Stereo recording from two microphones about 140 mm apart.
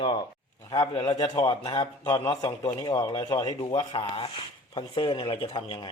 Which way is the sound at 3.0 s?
25° left (ahead or behind).